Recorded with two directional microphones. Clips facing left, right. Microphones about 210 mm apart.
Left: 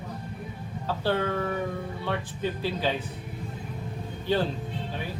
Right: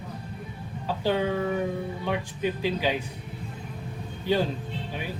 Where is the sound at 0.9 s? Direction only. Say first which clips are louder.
Right 1 dB; 15° right (ahead or behind).